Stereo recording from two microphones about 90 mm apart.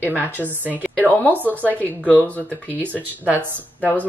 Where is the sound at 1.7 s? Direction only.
20° left (ahead or behind).